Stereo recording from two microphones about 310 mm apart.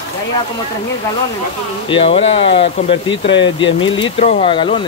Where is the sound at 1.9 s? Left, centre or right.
Centre.